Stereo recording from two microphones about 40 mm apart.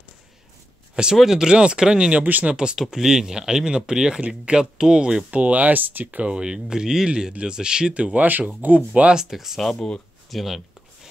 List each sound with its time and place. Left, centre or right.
1.2 s speech: centre
1.5 s speech: right
5.3 s speech: right
6.2 s speech: right
7.9 s speech: right
9.1 s speech: centre
9.6 s speech: centre